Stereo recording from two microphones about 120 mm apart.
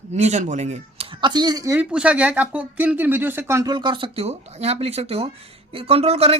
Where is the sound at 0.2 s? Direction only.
80° right.